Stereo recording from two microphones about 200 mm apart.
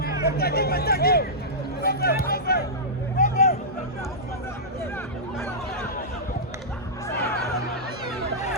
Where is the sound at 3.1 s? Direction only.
45° left (ahead or behind).